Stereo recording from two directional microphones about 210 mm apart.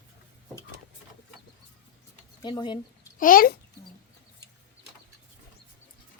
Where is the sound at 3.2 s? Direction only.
45° left (ahead or behind).